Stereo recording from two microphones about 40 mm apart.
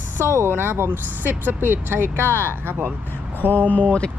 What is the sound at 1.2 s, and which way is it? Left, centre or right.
Speech, right.